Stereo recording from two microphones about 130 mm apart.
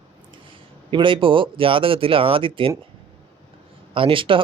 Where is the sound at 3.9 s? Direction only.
45° right (ahead or behind).